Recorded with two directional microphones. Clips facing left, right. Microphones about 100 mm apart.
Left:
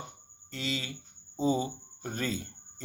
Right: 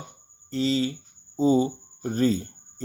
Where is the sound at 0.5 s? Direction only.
35° right (ahead or behind).